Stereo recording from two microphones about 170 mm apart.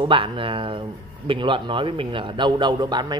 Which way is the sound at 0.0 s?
30° right (ahead or behind).